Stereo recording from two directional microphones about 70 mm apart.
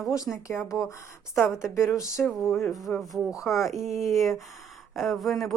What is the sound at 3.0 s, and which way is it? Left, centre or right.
Speech, centre.